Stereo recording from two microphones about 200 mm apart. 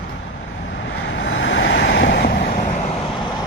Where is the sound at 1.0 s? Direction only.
70° left (ahead or behind).